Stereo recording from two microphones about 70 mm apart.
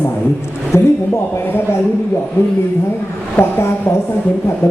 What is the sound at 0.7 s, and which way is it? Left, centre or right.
Speech, left.